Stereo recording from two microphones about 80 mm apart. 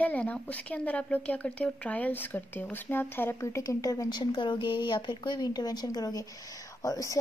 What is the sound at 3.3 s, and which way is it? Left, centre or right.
Speech, left.